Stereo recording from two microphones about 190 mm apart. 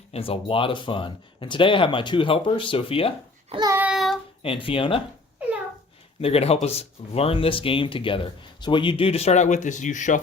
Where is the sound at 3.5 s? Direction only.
20° right (ahead or behind).